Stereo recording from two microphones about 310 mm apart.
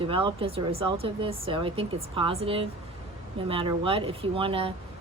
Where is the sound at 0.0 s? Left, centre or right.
Centre.